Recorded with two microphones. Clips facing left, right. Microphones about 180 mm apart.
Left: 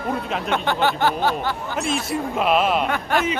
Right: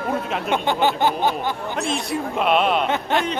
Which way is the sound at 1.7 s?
Centre (ahead or behind).